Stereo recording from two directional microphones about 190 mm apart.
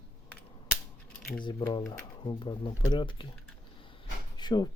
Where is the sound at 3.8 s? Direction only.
25° left (ahead or behind).